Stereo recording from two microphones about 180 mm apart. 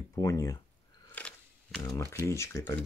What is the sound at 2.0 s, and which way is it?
Speech, 15° right (ahead or behind).